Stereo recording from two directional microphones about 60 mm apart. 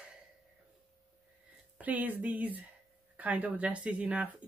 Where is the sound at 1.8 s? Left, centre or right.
Right.